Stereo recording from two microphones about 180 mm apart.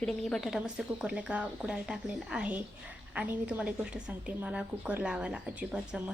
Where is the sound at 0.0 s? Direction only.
Centre (ahead or behind).